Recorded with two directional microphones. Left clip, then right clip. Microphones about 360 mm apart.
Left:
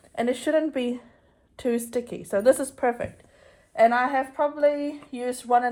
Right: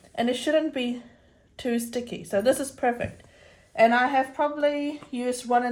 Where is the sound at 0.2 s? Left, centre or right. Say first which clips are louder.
Even; centre.